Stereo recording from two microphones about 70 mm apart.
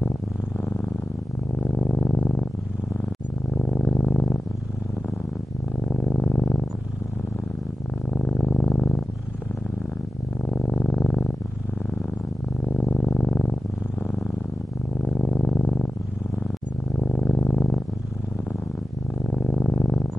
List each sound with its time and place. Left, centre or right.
1.8 s purr: centre
3.6 s purr: centre
6.1 s purr: centre
8.1 s purr: centre
10.7 s purr: centre
12.6 s purr: centre
15.1 s purr: centre
17.1 s purr: centre
17.4 s purr: centre
19.4 s purr: centre